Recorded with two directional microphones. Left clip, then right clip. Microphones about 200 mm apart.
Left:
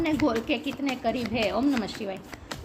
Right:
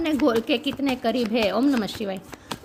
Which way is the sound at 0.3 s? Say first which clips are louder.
Right 5 dB; 55° right (ahead or behind).